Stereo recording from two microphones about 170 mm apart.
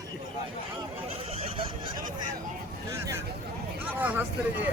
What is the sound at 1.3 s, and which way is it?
Fowl, 35° right (ahead or behind).